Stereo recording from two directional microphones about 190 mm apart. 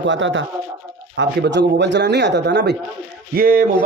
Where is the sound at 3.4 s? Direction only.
50° right (ahead or behind).